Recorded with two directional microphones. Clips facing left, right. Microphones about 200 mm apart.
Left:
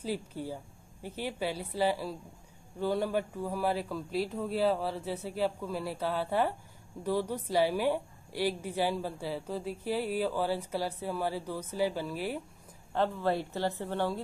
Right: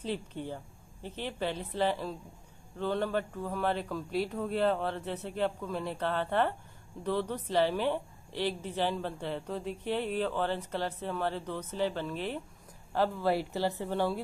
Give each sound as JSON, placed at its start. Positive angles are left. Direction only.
{"t": 0.0, "sound": "a woman's voice", "side_deg": 10}
{"t": 12.9, "sound": "speech", "side_deg": -5}